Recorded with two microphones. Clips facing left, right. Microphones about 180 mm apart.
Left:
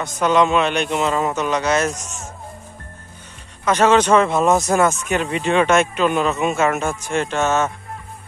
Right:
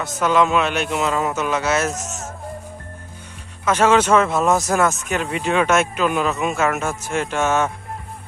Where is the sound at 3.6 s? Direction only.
5° right (ahead or behind).